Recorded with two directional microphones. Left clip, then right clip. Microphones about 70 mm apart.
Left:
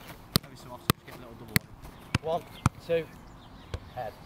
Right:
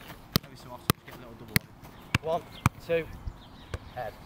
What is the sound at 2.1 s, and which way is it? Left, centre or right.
Basketball bounce, right.